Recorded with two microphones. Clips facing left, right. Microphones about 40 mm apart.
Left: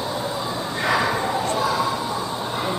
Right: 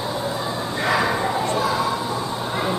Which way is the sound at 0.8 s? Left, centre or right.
Centre.